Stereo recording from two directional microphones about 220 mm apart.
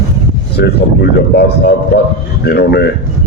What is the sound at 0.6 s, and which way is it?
A man's voice, 50° left (ahead or behind).